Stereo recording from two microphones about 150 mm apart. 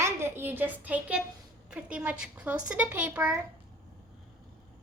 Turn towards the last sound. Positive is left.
turn(degrees=-10)  # may be behind; listen again after turning